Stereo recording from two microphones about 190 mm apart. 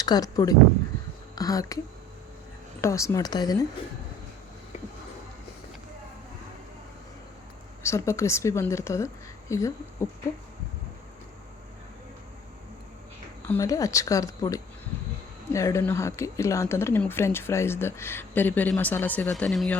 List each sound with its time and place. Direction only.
0.0 s speech: 20° left (ahead or behind)
2.8 s speech: 15° left (ahead or behind)
7.8 s speech: 15° left (ahead or behind)
13.5 s speech: 15° left (ahead or behind)